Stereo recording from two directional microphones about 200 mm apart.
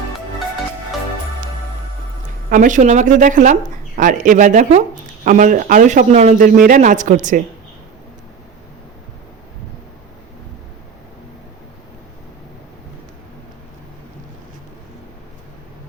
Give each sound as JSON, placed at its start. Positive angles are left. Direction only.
{"t": 2.5, "sound": "speech", "side_deg": -40}